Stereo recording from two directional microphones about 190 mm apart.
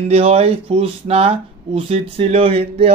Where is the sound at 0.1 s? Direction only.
35° right (ahead or behind).